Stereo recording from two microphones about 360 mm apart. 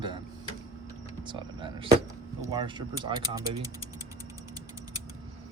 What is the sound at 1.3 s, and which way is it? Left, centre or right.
Speech, centre.